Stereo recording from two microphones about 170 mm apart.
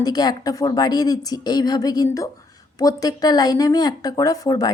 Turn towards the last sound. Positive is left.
turn(degrees=20)  # may be behind; listen again after turning